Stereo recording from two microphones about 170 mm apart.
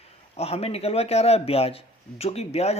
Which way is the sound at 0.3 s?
35° left (ahead or behind).